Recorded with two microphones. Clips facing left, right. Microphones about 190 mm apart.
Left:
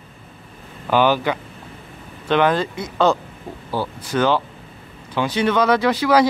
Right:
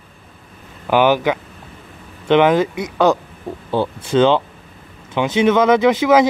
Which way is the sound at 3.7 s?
25° right (ahead or behind).